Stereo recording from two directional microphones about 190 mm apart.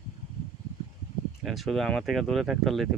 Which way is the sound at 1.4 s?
Centre (ahead or behind).